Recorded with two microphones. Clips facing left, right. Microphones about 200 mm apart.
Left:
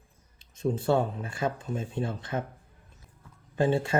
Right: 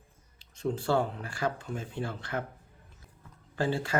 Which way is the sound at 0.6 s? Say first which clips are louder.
Left 3 dB; 20° left (ahead or behind).